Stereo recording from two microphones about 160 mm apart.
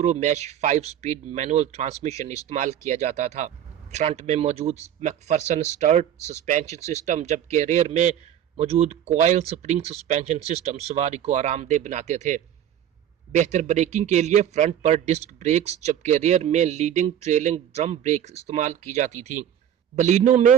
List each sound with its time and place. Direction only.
0.0 s speech: 45° right (ahead or behind)